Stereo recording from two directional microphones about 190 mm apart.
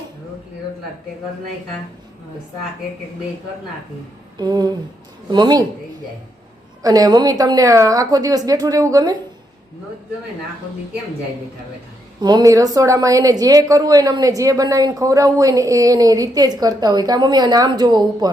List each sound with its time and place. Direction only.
4.4 s a woman's voice: 20° right (ahead or behind)
6.8 s a woman's voice: 20° right (ahead or behind)
12.2 s a woman's voice: 20° right (ahead or behind)